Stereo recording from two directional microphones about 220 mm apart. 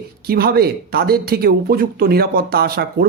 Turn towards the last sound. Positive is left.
turn(degrees=-45)  # may be behind; listen again after turning